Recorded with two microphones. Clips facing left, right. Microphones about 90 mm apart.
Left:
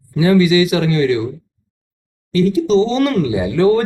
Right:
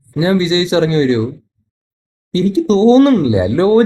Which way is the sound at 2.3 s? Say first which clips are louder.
Right 1 dB; 30° right (ahead or behind).